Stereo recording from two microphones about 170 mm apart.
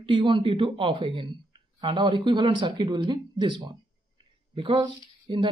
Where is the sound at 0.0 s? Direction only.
30° right (ahead or behind).